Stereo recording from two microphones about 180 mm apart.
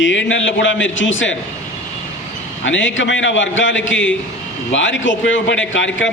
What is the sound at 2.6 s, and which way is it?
A man's voice, 90° left.